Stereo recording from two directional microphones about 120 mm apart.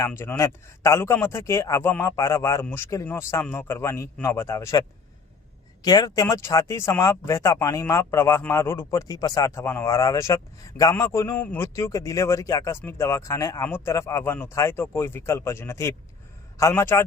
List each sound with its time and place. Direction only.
0.0 s speech: 20° left (ahead or behind)